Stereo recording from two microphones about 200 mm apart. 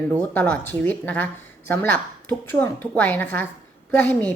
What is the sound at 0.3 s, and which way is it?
A woman's voice, 10° left (ahead or behind).